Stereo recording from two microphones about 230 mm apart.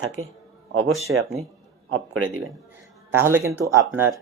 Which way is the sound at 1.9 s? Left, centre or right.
Right.